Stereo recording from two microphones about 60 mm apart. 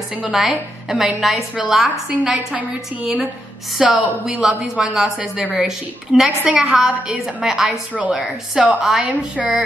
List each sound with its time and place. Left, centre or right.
0.2 s a woman's voice: centre
2.3 s a woman's voice: centre